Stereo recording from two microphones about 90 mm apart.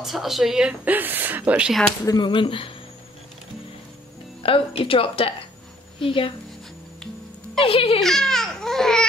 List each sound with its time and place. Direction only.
0.0 s speech: 5° right (ahead or behind); by 1.7 s 20° right (ahead or behind)
2.0 s speech: 55° left (ahead or behind); by 2.7 s 80° left
4.4 s a woman's voice: 90° left
7.6 s speech: 90° left
8.0 s babbling: 5° left (ahead or behind)